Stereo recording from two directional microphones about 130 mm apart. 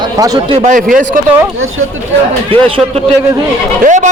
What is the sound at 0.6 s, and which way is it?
Speech, 80° right.